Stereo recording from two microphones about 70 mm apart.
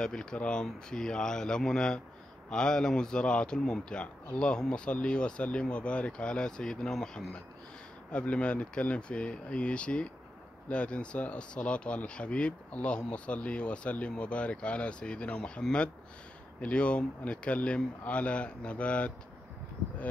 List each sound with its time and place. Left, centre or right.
0.0 s a man's voice: centre